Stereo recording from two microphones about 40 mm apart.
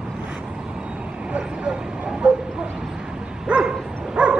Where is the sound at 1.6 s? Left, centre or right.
Right.